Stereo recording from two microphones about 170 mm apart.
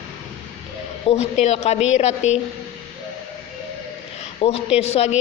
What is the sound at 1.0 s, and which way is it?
A man's voice, 40° left (ahead or behind).